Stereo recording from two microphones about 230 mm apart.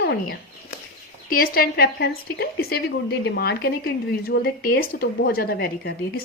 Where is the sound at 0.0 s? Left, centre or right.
Left.